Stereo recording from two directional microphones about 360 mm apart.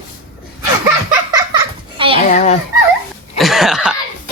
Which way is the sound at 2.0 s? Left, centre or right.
Centre.